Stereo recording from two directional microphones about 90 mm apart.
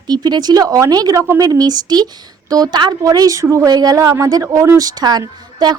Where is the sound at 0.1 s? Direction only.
50° right (ahead or behind); by 3.7 s 35° right (ahead or behind).